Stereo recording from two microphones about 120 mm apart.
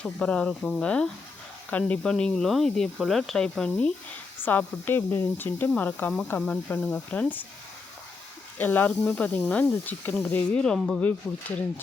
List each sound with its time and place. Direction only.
0.0 s speech: 10° left (ahead or behind)
8.5 s speech: 15° left (ahead or behind)